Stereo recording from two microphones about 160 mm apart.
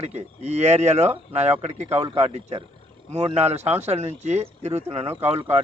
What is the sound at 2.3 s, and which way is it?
Speech, 40° right (ahead or behind).